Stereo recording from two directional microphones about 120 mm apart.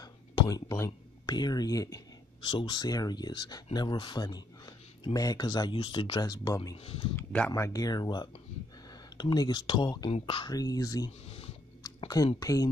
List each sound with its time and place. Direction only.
0.0 s speech: 30° left (ahead or behind)
5.8 s speech: 50° left (ahead or behind)
6.1 s speech: 35° left (ahead or behind)
6.8 s speech: 55° left (ahead or behind)
7.2 s speech: 15° left (ahead or behind)
7.6 s speech: 30° left (ahead or behind)
10.5 s speech: 30° left (ahead or behind)
11.2 s a sound: 55° left (ahead or behind)
12.4 s speech: 30° left (ahead or behind)